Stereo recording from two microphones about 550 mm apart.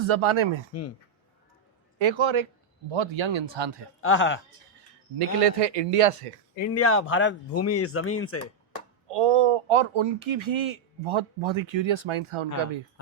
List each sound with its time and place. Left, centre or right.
0.0 s a man's voice: right
0.7 s speech: left
2.0 s a man's voice: right
4.0 s speech: left
5.2 s a man's voice: right
6.6 s speech: left
9.0 s speech: right